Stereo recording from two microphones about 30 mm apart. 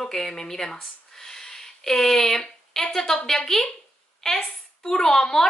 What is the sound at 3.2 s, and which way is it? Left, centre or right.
Speech, centre.